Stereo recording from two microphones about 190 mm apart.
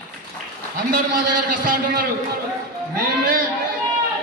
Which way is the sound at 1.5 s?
45° right (ahead or behind).